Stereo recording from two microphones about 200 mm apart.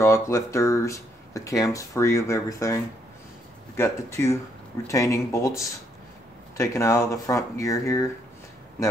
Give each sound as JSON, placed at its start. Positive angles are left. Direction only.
{"t": 0.0, "sound": "speech", "side_deg": 15}